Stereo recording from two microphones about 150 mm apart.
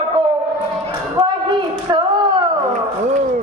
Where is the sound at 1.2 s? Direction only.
30° right (ahead or behind).